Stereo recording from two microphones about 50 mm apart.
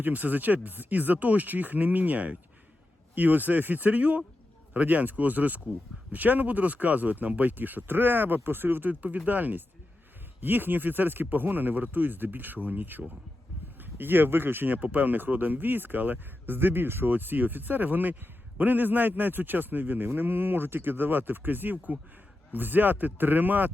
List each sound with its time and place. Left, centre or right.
0.0 s speech: right
8.9 s speech: right